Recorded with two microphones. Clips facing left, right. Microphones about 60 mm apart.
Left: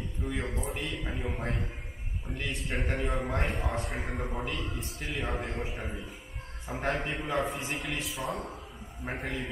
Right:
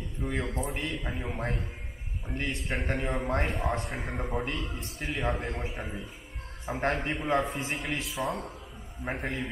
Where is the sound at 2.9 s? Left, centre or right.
Centre.